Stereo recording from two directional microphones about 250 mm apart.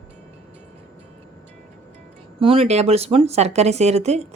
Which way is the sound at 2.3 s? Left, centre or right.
Right.